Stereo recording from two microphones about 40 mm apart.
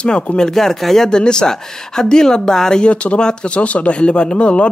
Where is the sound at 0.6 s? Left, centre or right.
Centre.